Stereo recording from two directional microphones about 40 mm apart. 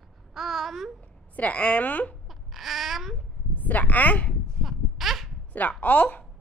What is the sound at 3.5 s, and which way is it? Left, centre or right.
Speech, left.